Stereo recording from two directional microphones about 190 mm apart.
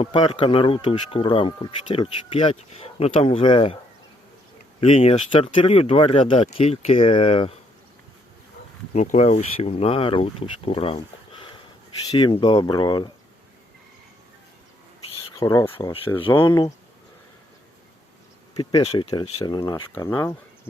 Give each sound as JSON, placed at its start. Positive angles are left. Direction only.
{"t": 0.0, "sound": "speech", "side_deg": 30}
{"t": 4.8, "sound": "speech", "side_deg": 35}
{"t": 8.9, "sound": "speech", "side_deg": 35}
{"t": 15.4, "sound": "speech", "side_deg": 15}
{"t": 15.7, "sound": "speech", "side_deg": 30}
{"t": 16.5, "sound": "speech", "side_deg": 20}
{"t": 18.5, "sound": "speech", "side_deg": 25}